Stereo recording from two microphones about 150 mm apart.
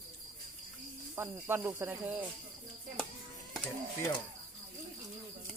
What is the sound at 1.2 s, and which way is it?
Speech, 15° right (ahead or behind).